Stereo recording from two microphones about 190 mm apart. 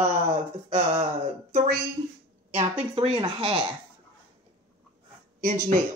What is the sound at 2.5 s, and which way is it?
Speech, 30° right (ahead or behind).